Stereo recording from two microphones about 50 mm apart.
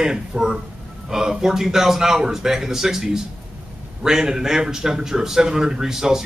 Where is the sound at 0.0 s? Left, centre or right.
Centre.